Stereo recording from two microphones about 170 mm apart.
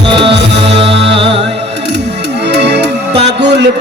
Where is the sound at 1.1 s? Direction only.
30° right (ahead or behind).